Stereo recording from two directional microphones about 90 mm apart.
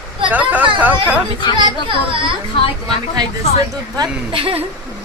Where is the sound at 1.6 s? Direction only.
65° right (ahead or behind).